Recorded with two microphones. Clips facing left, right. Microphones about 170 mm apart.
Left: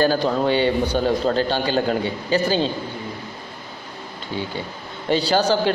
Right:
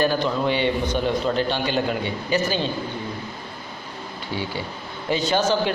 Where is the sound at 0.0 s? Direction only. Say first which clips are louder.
Left 3 dB; 35° left (ahead or behind).